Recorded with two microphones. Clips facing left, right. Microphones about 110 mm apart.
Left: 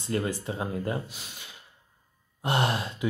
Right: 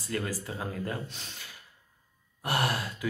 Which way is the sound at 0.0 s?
25° left (ahead or behind).